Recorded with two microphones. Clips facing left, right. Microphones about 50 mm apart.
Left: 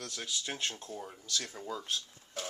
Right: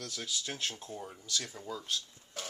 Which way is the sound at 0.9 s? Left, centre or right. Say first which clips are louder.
Even; centre.